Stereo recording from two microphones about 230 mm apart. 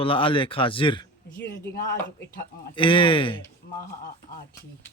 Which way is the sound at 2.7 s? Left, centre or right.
Left.